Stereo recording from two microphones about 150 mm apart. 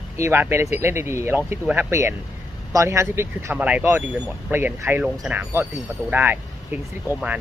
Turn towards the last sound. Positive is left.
turn(degrees=-10)  # may be behind; listen again after turning